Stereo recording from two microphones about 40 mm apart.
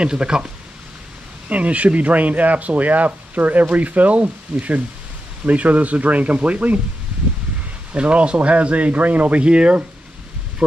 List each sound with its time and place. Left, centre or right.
0.0 s speech: right
1.5 s speech: right
7.9 s speech: right